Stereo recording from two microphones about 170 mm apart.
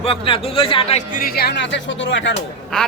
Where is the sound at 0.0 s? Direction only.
35° left (ahead or behind).